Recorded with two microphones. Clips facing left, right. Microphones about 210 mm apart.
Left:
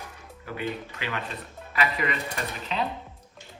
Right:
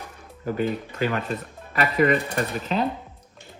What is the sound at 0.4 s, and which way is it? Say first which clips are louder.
Speech: right 7 dB; 45° right (ahead or behind).